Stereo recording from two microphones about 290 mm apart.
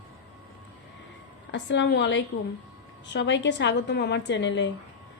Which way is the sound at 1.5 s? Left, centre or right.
Left.